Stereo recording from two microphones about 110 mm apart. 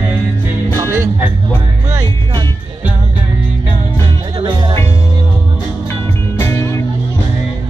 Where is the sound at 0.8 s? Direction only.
30° right (ahead or behind).